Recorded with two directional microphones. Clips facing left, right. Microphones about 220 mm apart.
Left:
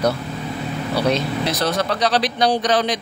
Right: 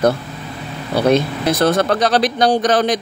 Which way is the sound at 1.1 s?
50° right (ahead or behind).